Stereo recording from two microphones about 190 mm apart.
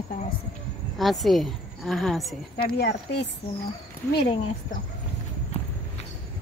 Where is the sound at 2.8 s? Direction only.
60° left (ahead or behind).